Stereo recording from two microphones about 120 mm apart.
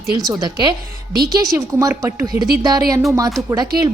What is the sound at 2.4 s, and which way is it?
A woman's voice, 35° right (ahead or behind).